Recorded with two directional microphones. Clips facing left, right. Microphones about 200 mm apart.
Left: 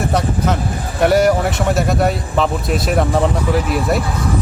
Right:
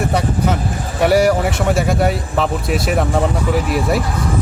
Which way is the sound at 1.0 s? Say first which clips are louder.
Even; 5° right (ahead or behind).